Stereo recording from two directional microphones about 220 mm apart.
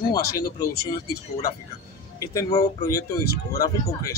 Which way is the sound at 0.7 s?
45° left (ahead or behind).